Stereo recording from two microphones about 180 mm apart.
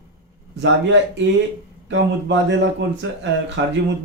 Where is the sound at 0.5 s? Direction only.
80° right.